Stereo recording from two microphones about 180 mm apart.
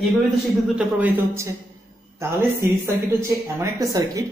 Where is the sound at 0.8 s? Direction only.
10° right (ahead or behind).